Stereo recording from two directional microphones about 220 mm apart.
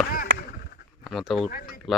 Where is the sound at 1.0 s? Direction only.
Centre (ahead or behind).